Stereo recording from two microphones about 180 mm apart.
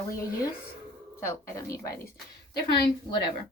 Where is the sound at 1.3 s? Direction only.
15° left (ahead or behind).